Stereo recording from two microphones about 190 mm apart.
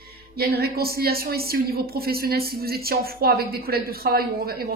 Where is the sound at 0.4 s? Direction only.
55° right (ahead or behind).